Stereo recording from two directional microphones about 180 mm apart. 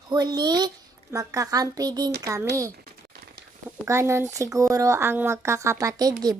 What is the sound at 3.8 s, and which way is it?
A child's voice, 15° right (ahead or behind).